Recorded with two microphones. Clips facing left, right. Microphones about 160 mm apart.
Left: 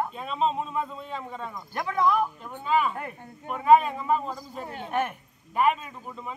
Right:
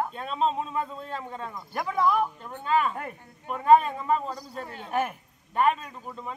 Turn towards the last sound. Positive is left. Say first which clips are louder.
# even
turn(degrees=5)  # may be behind; listen again after turning